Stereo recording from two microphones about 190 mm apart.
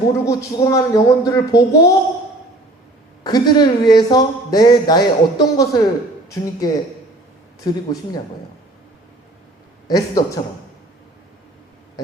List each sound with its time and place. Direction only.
0.3 s speech: 20° left (ahead or behind)
3.2 s speech: 20° left (ahead or behind)
9.8 s a man's voice: 20° left (ahead or behind)